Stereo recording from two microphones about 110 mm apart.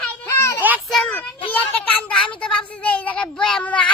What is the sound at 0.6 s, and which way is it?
Children playing, 15° right (ahead or behind).